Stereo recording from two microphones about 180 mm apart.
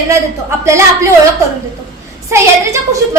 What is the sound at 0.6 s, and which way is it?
Speech, 15° right (ahead or behind).